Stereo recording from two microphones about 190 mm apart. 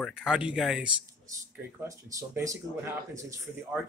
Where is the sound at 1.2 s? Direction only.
15° right (ahead or behind).